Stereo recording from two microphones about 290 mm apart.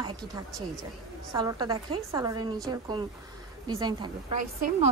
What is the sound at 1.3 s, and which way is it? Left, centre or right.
A woman's voice, centre.